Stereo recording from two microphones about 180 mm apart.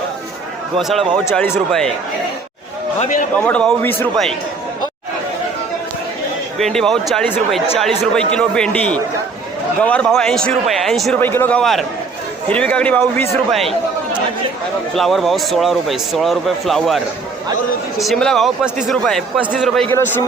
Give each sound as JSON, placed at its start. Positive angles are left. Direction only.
{"t": 0.8, "sound": "speech", "side_deg": 0}
{"t": 3.0, "sound": "a man's voice", "side_deg": 45}
{"t": 3.4, "sound": "a man's voice", "side_deg": 5}
{"t": 6.6, "sound": "speech", "side_deg": 0}
{"t": 11.2, "sound": "a man's voice", "side_deg": 10}
{"t": 14.9, "sound": "speech", "side_deg": 0}
{"t": 18.0, "sound": "speech", "side_deg": 0}